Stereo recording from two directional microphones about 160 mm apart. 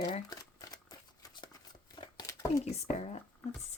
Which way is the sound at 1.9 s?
25° left (ahead or behind).